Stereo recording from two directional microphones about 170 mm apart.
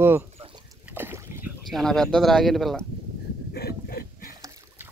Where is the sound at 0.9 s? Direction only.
15° right (ahead or behind).